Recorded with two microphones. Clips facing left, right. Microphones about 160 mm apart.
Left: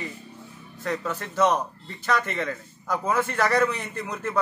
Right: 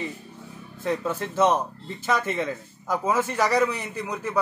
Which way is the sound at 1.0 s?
25° right (ahead or behind).